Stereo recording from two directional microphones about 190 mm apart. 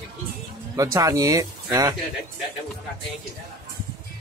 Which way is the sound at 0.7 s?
15° right (ahead or behind).